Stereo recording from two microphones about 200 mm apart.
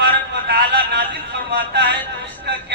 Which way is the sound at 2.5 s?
60° right (ahead or behind).